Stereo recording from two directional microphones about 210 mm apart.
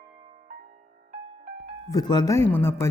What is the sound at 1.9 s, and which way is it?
Speech, 20° left (ahead or behind).